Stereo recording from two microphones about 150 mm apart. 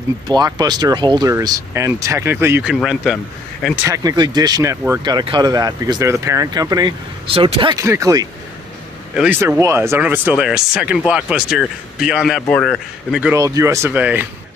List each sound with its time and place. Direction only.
0.3 s speech: 25° right (ahead or behind)
2.6 s speech: 5° right (ahead or behind)
3.7 s speech: 20° right (ahead or behind)
7.2 s speech: 40° right (ahead or behind)
7.7 s speech: 20° right (ahead or behind)
9.1 s speech: 5° right (ahead or behind)
9.4 s speech: 20° right (ahead or behind); by 13.3 s centre (ahead or behind)
13.3 s speech: 20° right (ahead or behind)